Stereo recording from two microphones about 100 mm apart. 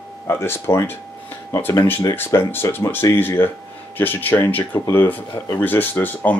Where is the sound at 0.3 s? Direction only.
25° left (ahead or behind).